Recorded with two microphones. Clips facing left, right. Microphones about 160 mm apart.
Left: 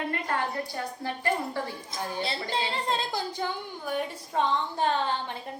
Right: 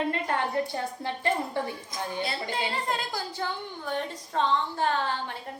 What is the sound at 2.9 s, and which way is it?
A woman's voice, 25° left (ahead or behind).